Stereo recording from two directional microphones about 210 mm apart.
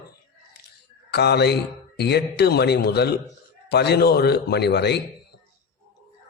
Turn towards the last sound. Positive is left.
turn(degrees=50)  # may be behind; listen again after turning